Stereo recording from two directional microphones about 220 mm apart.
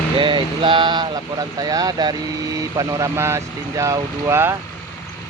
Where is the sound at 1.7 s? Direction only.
20° right (ahead or behind).